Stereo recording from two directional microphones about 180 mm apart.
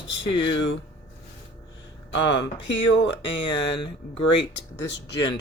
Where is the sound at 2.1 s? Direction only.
90° left.